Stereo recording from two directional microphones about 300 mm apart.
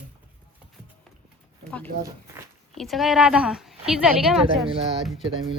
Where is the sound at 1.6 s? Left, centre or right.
Centre.